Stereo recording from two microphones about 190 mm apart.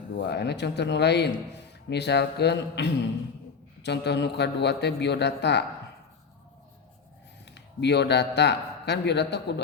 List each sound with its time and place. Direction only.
0.2 s a man's voice: 65° left (ahead or behind)
7.5 s speech: 65° left (ahead or behind)